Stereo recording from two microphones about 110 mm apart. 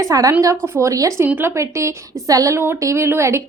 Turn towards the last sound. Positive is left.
turn(degrees=-25)  # may be behind; listen again after turning